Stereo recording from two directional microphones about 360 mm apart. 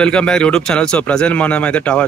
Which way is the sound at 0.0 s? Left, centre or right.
Centre.